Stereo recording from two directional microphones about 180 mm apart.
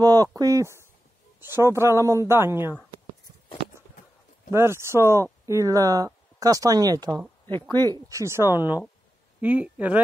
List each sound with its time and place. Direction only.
0.0 s a sound: 20° right (ahead or behind)
0.4 s speech: 20° right (ahead or behind)
4.5 s speech: 15° right (ahead or behind)